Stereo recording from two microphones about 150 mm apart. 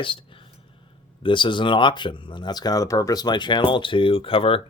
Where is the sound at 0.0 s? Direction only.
35° left (ahead or behind).